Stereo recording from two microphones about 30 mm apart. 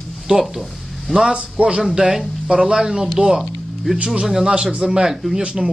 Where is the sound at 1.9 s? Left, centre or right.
Centre.